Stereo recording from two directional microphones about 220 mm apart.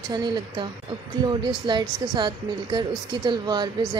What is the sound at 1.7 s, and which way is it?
A woman's voice, 20° right (ahead or behind).